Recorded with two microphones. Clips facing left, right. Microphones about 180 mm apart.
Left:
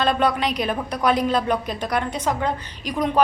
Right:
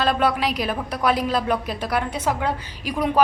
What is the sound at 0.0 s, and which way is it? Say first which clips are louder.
A woman's voice: even; 5° right (ahead or behind).